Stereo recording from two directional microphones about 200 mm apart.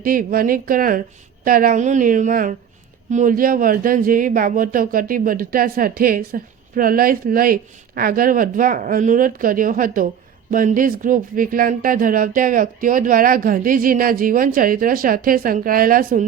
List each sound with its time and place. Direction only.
0.0 s a woman's voice: 45° right (ahead or behind)